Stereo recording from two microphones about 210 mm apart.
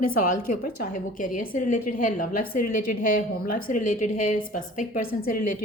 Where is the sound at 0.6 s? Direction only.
40° left (ahead or behind).